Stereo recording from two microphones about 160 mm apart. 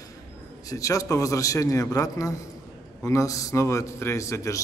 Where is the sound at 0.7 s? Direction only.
20° left (ahead or behind).